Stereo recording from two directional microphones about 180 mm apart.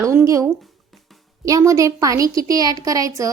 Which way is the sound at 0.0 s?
15° right (ahead or behind).